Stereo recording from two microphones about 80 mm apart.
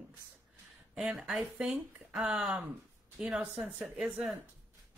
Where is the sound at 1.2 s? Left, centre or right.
Centre.